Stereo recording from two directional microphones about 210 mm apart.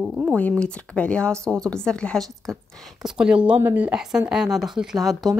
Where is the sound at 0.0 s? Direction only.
5° right (ahead or behind).